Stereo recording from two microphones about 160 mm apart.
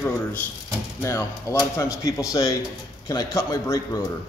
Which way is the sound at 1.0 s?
15° left (ahead or behind).